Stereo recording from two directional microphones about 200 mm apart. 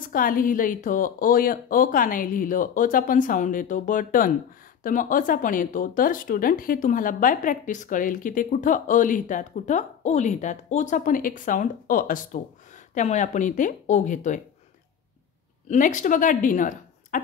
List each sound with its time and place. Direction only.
0.0 s speech: 45° left (ahead or behind)
15.7 s a woman's voice: 40° left (ahead or behind)